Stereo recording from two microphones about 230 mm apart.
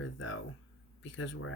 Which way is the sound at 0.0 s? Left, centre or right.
Left.